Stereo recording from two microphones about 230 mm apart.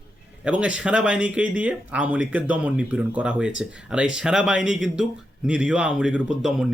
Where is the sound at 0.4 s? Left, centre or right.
Centre.